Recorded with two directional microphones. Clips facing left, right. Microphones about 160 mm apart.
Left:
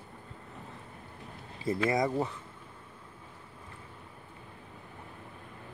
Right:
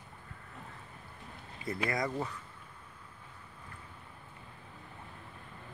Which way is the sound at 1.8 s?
20° left (ahead or behind).